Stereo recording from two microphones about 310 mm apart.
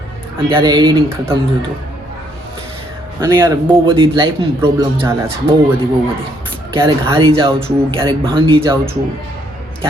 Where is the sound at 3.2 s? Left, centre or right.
Centre.